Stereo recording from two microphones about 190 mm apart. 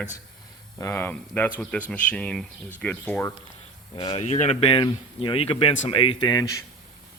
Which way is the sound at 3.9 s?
25° left (ahead or behind).